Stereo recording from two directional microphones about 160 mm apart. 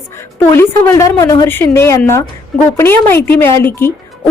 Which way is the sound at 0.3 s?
15° left (ahead or behind).